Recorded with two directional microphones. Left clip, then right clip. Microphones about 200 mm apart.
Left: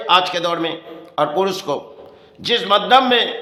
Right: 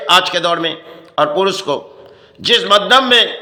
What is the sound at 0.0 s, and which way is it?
A man's voice, 10° right (ahead or behind).